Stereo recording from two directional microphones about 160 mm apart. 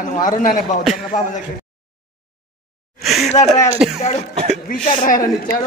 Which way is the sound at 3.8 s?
5° right (ahead or behind).